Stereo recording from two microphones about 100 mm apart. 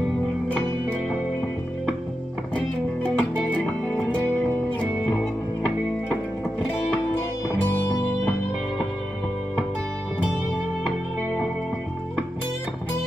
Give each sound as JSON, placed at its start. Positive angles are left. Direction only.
{"t": 2.5, "sound": "music", "side_deg": 15}